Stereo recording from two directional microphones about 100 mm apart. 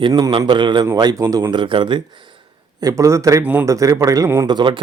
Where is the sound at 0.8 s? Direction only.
35° right (ahead or behind).